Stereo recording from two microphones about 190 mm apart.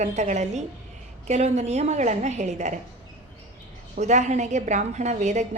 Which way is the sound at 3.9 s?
40° right (ahead or behind).